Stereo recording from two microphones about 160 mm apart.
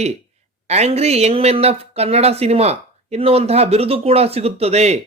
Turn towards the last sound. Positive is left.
turn(degrees=-45)  # may be behind; listen again after turning